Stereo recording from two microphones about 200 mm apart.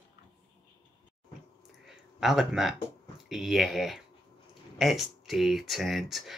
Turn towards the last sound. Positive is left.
turn(degrees=0)  # may be behind; listen again after turning